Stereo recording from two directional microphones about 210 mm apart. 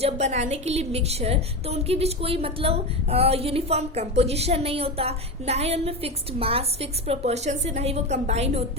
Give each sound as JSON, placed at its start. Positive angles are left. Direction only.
{"t": 0.0, "sound": "a woman's voice", "side_deg": -30}